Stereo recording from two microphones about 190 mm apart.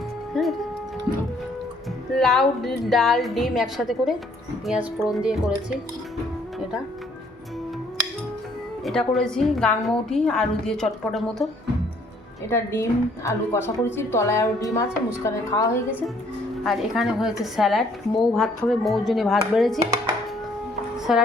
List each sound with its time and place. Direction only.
0.3 s speech: centre (ahead or behind)
2.1 s a woman's voice: centre (ahead or behind)
8.8 s a woman's voice: 5° left (ahead or behind)
12.5 s a woman's voice: 15° left (ahead or behind)
16.6 s a woman's voice: centre (ahead or behind)
21.1 s a woman's voice: 5° right (ahead or behind)